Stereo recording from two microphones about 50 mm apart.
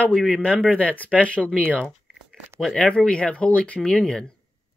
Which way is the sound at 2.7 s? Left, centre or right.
Centre.